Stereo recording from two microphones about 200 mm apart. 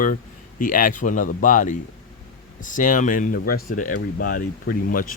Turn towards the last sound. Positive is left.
turn(degrees=45)  # may be behind; listen again after turning